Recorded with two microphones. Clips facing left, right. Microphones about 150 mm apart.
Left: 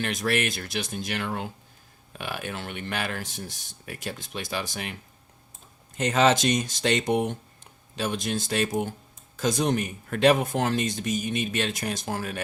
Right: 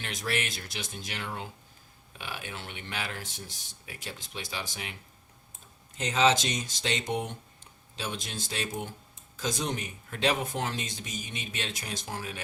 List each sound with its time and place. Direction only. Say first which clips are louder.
0.0 s speech: left 7 dB; 60° left (ahead or behind)
3.4 s speech: left 7 dB; 55° left (ahead or behind)
6.0 s speech: left 4 dB; 55° left (ahead or behind)
10.7 s speech: left 10 dB; 50° left (ahead or behind)